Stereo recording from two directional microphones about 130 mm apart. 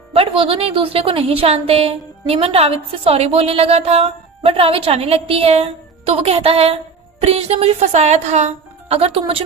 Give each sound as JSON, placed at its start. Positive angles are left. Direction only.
{"t": 0.1, "sound": "a woman's voice", "side_deg": -45}